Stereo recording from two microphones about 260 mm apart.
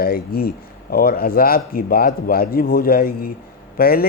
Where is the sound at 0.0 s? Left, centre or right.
Left.